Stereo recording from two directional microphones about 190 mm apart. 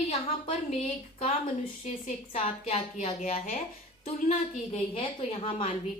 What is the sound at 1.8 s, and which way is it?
A woman's voice, 35° left (ahead or behind).